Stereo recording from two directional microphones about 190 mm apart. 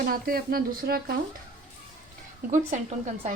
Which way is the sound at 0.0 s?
50° right (ahead or behind).